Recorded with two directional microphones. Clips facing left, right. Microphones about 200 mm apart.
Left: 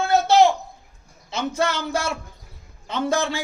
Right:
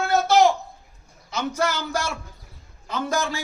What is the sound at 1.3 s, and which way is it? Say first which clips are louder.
A man's voice: left 1 dB; 30° left (ahead or behind).